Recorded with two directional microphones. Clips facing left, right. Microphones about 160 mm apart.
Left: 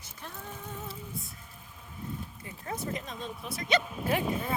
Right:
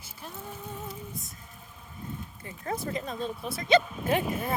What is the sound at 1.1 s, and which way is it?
Speech, 45° right (ahead or behind).